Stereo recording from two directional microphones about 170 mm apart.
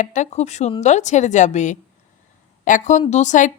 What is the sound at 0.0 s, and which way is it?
A woman's voice, 45° left (ahead or behind).